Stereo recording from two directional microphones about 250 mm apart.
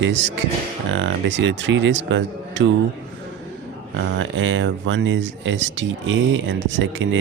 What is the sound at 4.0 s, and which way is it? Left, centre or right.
Speech, right.